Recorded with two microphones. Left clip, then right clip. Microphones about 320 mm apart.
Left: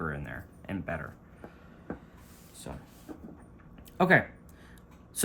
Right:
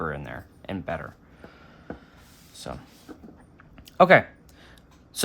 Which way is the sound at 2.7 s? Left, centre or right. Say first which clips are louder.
Right 7 dB; right.